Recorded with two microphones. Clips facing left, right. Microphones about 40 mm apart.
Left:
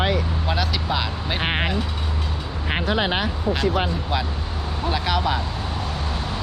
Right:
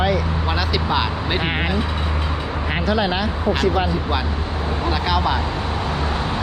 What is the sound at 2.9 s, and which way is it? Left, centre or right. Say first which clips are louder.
Speech: right 2 dB; left.